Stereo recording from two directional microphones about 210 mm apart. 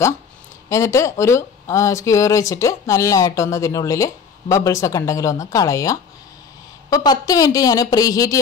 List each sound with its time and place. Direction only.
0.7 s speech: 15° left (ahead or behind)